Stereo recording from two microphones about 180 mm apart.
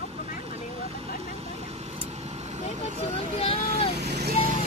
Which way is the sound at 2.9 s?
35° left (ahead or behind).